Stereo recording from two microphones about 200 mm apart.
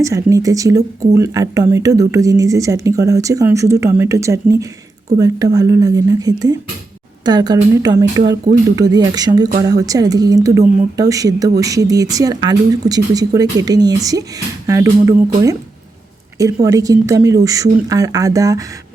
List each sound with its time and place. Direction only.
0.0 s speech: 15° right (ahead or behind)
5.5 s a woman's voice: 15° right (ahead or behind)
16.6 s speech: 15° right (ahead or behind)